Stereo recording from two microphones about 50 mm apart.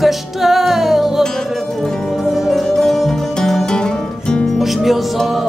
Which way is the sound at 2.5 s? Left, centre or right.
Centre.